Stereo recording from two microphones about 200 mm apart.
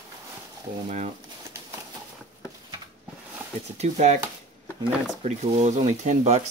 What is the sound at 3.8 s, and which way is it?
Speech, 35° right (ahead or behind).